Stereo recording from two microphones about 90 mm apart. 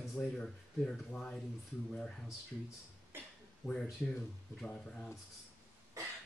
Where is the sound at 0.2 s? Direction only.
10° left (ahead or behind).